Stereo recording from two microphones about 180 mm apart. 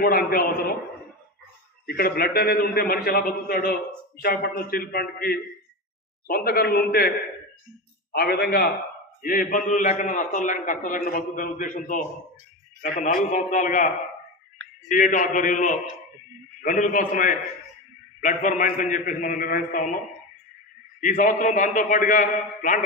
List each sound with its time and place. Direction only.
0.0 s a man's voice: 55° left (ahead or behind)
1.9 s a man's voice: 60° left (ahead or behind)
8.1 s a man's voice: 60° left (ahead or behind)
9.2 s a man's voice: 50° left (ahead or behind)
13.0 s a man's voice: 45° left (ahead or behind)
14.9 s a man's voice: 50° left (ahead or behind)
21.0 s a man's voice: 45° left (ahead or behind)